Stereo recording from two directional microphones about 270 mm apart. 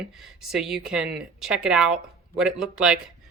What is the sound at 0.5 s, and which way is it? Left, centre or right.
Speech, centre.